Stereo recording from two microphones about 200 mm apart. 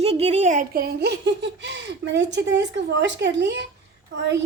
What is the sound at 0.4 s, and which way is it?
A child's voice, 40° right (ahead or behind).